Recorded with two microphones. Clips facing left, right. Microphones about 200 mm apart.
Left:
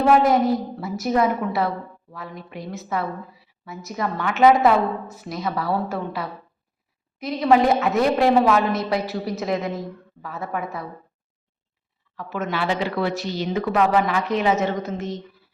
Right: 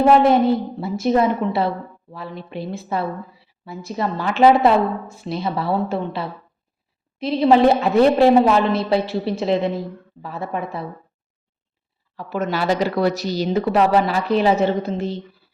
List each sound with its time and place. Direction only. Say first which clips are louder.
0.0 s a woman's voice: right 3 dB; 25° right (ahead or behind)
12.1 s a woman's voice: right 4 dB; 35° right (ahead or behind)